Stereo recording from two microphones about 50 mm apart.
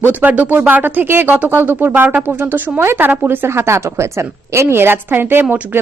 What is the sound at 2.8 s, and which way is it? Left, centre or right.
Speech, right.